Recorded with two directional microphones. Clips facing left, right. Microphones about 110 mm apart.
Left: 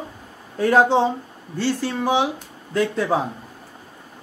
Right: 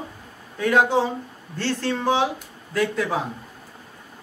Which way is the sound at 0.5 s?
35° left (ahead or behind).